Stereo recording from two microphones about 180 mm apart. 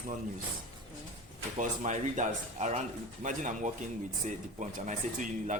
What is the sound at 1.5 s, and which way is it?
Speech, 45° right (ahead or behind).